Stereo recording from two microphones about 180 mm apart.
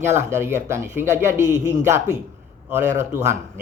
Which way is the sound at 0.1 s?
15° right (ahead or behind).